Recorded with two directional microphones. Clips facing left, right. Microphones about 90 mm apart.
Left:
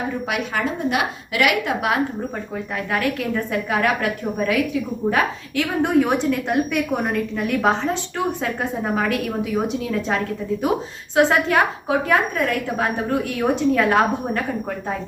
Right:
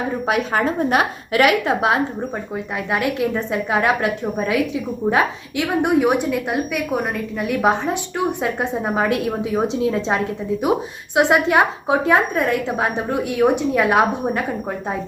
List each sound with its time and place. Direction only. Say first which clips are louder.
0.3 s a woman's voice: right 7 dB; 40° right (ahead or behind); by 6.1 s 15° right (ahead or behind)
6.3 s a woman's voice: left 1 dB; 5° right (ahead or behind)